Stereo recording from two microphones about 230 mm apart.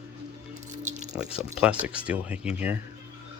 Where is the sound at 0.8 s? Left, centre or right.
Right.